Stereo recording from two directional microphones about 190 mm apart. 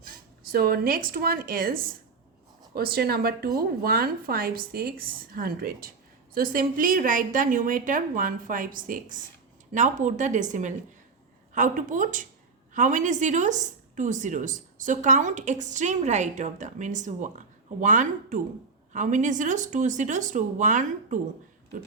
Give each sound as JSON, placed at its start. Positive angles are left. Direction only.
{"t": 0.0, "sound": "a woman's voice", "side_deg": -50}